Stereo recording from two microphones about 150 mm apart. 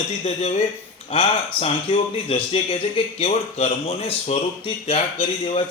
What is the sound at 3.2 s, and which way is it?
Speech, 45° left (ahead or behind).